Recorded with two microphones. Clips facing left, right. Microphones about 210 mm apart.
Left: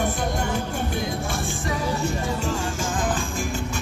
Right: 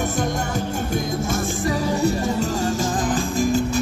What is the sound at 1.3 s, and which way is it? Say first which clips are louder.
Music: right 5 dB; 40° right (ahead or behind).